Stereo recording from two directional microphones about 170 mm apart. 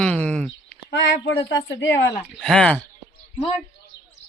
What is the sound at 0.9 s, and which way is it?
Speech, 90° left.